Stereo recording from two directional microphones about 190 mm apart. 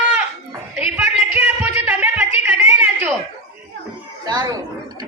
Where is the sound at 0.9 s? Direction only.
10° right (ahead or behind).